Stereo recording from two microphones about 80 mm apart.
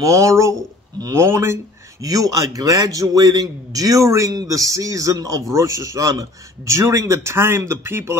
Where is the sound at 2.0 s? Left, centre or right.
Right.